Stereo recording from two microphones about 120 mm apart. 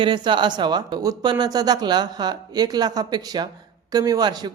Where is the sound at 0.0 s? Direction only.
40° right (ahead or behind).